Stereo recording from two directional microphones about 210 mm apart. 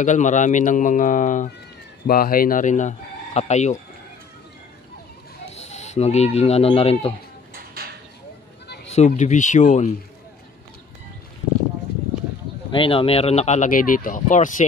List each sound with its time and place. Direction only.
0.0 s speech: 35° left (ahead or behind)
5.5 s speech: 30° left (ahead or behind)
8.9 s speech: 35° left (ahead or behind)
12.7 s speech: 25° left (ahead or behind)